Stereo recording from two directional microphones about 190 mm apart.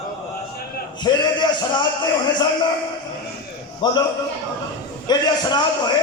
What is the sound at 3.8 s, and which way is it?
Speech, 20° left (ahead or behind).